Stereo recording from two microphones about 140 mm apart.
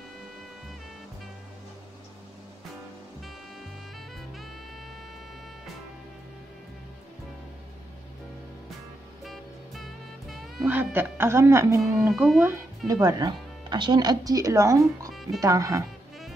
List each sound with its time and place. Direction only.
9.2 s music: centre (ahead or behind)
10.6 s speech: 15° right (ahead or behind)
12.1 s speech: centre (ahead or behind)
12.4 s speech: 20° right (ahead or behind)